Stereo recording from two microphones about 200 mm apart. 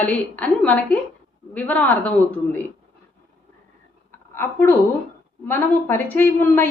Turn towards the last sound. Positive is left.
turn(degrees=10)  # may be behind; listen again after turning